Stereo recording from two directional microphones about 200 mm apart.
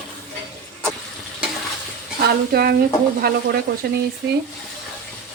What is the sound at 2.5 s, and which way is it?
Speech, 50° right (ahead or behind).